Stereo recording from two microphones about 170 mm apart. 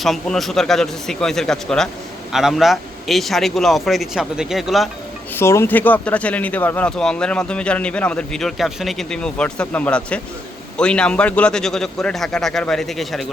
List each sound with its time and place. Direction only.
0.0 s a man's voice: centre (ahead or behind)
5.3 s a man's voice: 15° left (ahead or behind)